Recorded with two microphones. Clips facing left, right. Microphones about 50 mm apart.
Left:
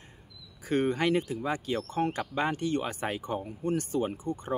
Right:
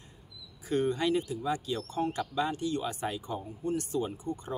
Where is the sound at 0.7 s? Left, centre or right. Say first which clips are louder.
Left 2 dB; left.